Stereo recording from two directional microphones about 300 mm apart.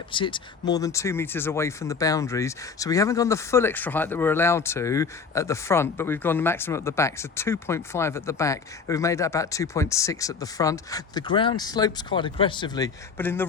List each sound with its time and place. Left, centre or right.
0.1 s speech: centre